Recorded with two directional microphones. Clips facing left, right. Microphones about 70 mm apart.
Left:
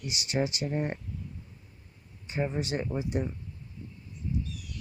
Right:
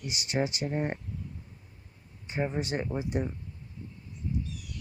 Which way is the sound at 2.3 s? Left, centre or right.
Right.